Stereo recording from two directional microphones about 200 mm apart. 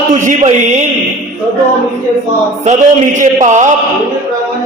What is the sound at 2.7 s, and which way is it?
A man's voice, 40° right (ahead or behind).